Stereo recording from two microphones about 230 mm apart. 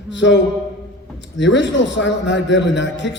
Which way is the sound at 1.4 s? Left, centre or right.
Left.